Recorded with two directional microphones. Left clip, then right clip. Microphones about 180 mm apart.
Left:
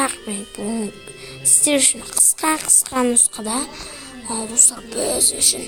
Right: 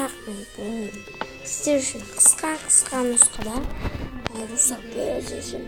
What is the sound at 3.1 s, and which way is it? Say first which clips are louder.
Music: left 2 dB; 25° left (ahead or behind).